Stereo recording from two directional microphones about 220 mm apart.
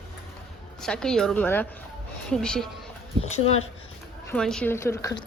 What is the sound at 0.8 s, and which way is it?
A woman's voice, 5° left (ahead or behind).